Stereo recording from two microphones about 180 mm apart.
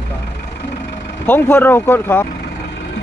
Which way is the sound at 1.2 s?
10° left (ahead or behind).